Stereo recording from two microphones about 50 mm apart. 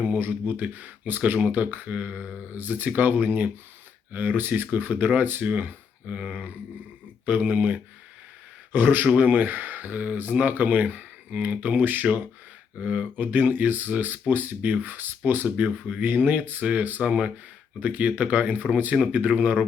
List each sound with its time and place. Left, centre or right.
0.0 s speech: right
6.1 s speech: right
7.3 s speech: right